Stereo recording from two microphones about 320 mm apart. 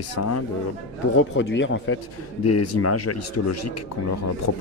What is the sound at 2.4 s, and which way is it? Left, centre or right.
A man's voice, left.